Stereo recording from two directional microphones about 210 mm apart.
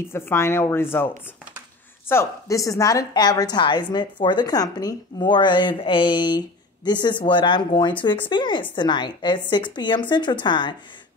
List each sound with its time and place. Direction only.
0.0 s a woman's voice: 10° left (ahead or behind)